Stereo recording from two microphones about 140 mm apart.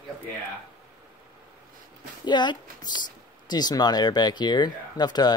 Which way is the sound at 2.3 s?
30° left (ahead or behind).